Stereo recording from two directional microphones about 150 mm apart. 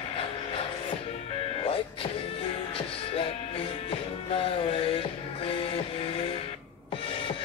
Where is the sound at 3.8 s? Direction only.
35° left (ahead or behind).